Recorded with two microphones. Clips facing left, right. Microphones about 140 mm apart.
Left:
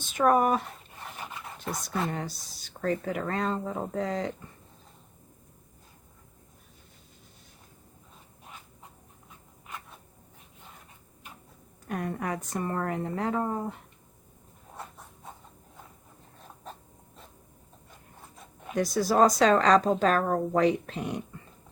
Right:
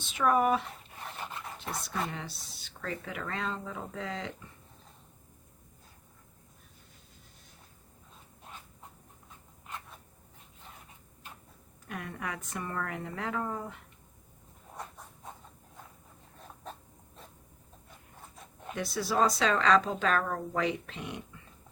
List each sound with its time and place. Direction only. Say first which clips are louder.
0.1 s speech: left 3 dB; 45° left (ahead or behind)
1.0 s rub: even; 10° left (ahead or behind)
2.0 s speech: left 7 dB; 45° left (ahead or behind)
11.9 s speech: left 7 dB; 40° left (ahead or behind)
18.7 s speech: left 6 dB; 40° left (ahead or behind)